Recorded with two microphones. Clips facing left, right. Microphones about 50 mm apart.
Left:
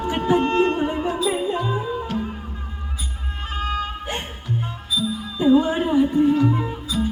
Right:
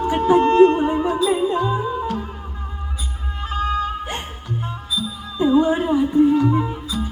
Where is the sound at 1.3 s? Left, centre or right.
Centre.